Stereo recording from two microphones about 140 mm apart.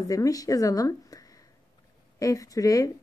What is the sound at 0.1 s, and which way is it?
Speech, 25° left (ahead or behind).